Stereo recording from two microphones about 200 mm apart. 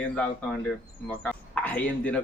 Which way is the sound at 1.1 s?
5° left (ahead or behind).